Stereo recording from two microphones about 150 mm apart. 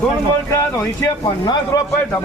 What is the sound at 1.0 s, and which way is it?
Speech, 25° left (ahead or behind).